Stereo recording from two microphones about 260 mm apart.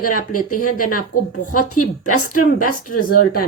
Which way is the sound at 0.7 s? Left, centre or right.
Left.